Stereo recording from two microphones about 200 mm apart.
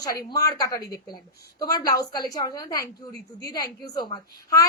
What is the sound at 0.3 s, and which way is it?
A woman's voice, 20° left (ahead or behind).